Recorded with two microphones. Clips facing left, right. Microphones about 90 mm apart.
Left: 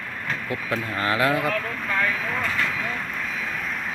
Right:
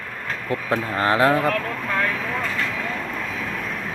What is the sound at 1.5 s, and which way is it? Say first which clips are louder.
Speech: right 2 dB; 65° right (ahead or behind).